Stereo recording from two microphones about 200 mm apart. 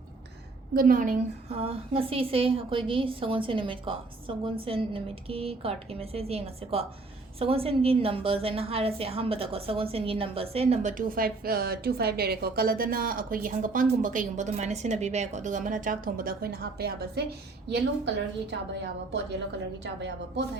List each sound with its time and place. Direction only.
0.7 s a woman's voice: 45° right (ahead or behind)
19.8 s a woman's voice: 60° right (ahead or behind)